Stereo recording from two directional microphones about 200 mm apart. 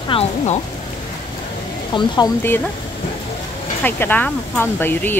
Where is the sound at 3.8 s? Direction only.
10° left (ahead or behind).